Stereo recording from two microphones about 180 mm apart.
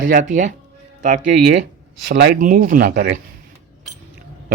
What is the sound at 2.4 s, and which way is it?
Speech, 45° right (ahead or behind).